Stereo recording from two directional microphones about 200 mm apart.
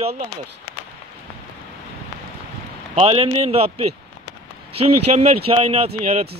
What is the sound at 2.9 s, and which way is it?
Speech, 30° right (ahead or behind).